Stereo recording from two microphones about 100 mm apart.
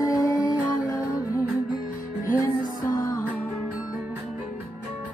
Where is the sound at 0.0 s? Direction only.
35° left (ahead or behind).